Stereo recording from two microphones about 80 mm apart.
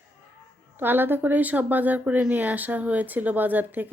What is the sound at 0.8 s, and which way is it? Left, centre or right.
Speech, right.